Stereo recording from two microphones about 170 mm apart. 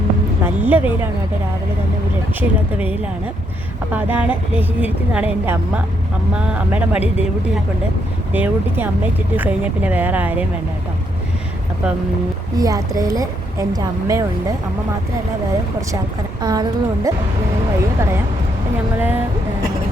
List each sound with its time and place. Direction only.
0.4 s a sound: 10° right (ahead or behind)
2.4 s a woman's voice: 10° right (ahead or behind)
3.9 s a woman's voice: 10° right (ahead or behind)
12.5 s a woman's voice: 20° right (ahead or behind)
16.4 s a woman's voice: 25° right (ahead or behind)
18.9 s a woman's voice: 10° right (ahead or behind)